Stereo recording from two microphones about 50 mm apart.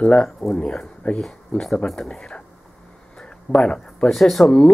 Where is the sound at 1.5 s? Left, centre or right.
Left.